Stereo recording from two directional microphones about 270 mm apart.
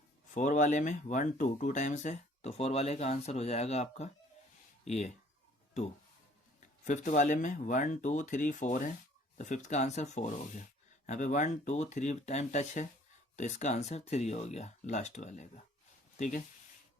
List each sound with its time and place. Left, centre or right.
0.3 s speech: left
6.8 s speech: left